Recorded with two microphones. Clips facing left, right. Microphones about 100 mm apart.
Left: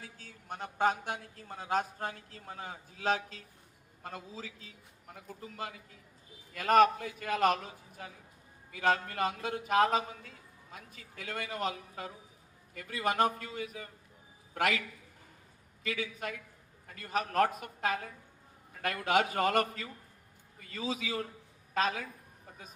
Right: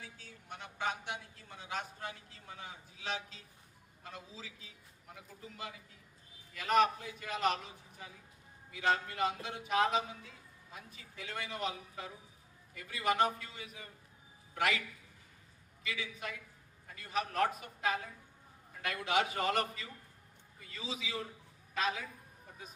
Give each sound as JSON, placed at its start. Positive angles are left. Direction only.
{"t": 0.0, "sound": "a man's voice", "side_deg": 45}